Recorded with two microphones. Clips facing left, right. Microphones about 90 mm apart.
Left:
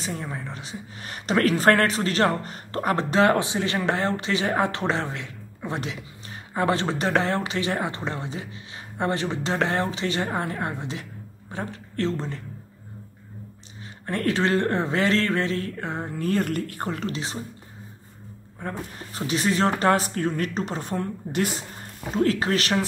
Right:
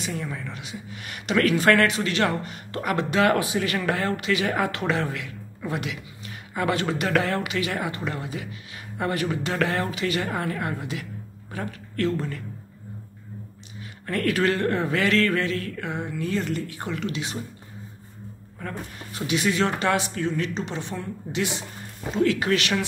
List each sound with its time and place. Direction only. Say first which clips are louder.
0.0 s speech: right 1 dB; 35° left (ahead or behind)
14.0 s speech: right 1 dB; 30° left (ahead or behind)
18.6 s speech: left 2 dB; 35° left (ahead or behind)